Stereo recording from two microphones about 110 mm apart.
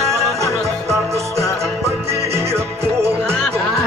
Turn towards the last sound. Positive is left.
turn(degrees=-25)  # may be behind; listen again after turning